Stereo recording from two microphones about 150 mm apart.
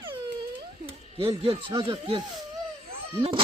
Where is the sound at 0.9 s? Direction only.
40° right (ahead or behind).